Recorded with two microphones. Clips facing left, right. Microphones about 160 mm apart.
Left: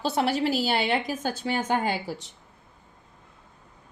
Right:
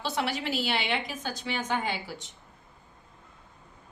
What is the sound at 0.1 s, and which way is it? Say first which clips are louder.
A woman's voice: left 6 dB; 35° left (ahead or behind).